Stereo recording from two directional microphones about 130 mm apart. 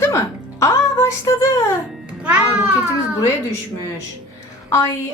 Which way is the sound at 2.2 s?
10° right (ahead or behind).